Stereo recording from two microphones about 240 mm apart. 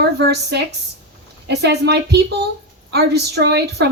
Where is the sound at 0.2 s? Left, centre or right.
Right.